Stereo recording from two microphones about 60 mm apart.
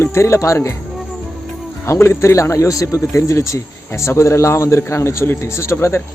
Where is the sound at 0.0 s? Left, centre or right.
Left.